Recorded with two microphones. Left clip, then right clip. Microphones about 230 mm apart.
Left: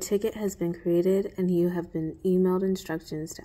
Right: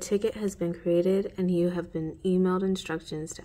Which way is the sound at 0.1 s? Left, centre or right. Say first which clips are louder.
Even; centre.